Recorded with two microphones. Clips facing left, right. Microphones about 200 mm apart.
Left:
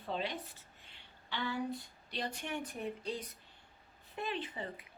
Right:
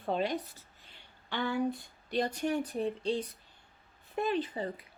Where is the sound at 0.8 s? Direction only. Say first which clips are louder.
Right 1 dB; 50° right (ahead or behind).